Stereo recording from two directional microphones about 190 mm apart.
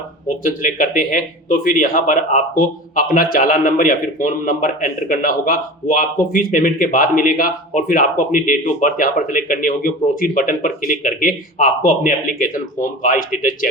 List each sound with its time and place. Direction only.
0.4 s speech: 45° left (ahead or behind)